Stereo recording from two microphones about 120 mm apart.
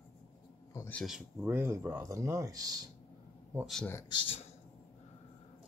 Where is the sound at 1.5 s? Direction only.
20° right (ahead or behind).